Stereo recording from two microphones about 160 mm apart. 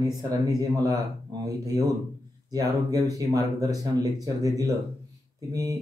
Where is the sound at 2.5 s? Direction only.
20° right (ahead or behind).